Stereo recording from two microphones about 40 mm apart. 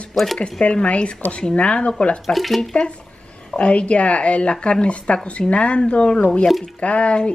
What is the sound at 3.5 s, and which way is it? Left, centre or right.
Speech, left.